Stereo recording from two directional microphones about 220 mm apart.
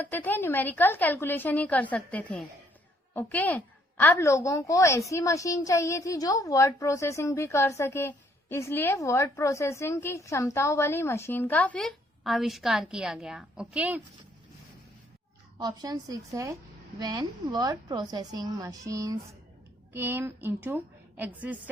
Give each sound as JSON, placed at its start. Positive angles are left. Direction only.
{"t": 0.0, "sound": "a woman's voice", "side_deg": 10}
{"t": 15.5, "sound": "a woman's voice", "side_deg": -15}